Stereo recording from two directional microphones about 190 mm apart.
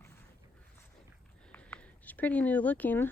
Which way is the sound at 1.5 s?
10° left (ahead or behind).